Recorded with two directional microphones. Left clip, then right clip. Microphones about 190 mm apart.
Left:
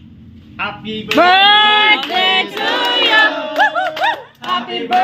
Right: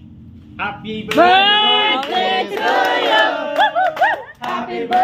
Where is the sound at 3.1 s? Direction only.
40° left (ahead or behind).